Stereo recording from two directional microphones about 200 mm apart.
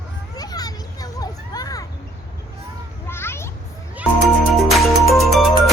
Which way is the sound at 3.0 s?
10° left (ahead or behind).